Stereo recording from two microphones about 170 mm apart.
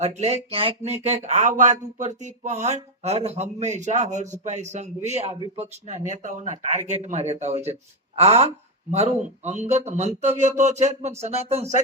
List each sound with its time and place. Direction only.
0.0 s speech: 40° right (ahead or behind)